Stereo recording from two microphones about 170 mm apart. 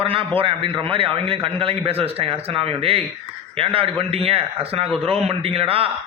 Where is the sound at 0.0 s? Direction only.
35° right (ahead or behind).